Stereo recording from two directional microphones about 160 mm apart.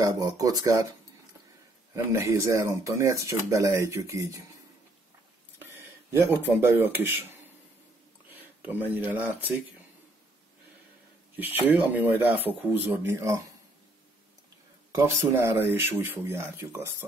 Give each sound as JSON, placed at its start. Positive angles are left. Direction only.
{"t": 0.0, "sound": "speech", "side_deg": -20}
{"t": 2.0, "sound": "speech", "side_deg": -20}
{"t": 6.2, "sound": "speech", "side_deg": -15}
{"t": 8.3, "sound": "a sound", "side_deg": -10}
{"t": 9.0, "sound": "speech", "side_deg": -10}
{"t": 11.3, "sound": "speech", "side_deg": -10}
{"t": 15.0, "sound": "speech", "side_deg": -15}